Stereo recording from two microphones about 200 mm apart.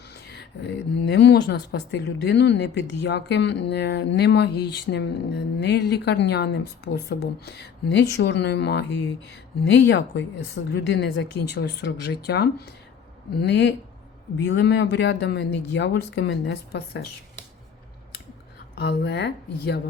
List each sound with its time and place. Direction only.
0.1 s speech: 55° left (ahead or behind)
18.8 s speech: 55° left (ahead or behind)